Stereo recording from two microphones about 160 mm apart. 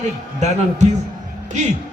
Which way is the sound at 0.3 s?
45° right (ahead or behind).